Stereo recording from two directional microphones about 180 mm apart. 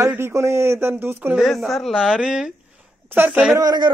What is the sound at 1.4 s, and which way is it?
A woman's voice, centre (ahead or behind).